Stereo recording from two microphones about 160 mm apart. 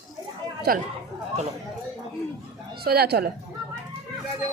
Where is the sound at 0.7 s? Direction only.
70° right (ahead or behind).